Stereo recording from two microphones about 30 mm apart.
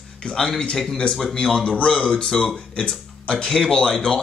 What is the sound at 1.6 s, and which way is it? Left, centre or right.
Speech, left.